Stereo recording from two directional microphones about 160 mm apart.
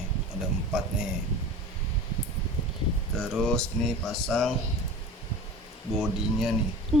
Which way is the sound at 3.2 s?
5° left (ahead or behind).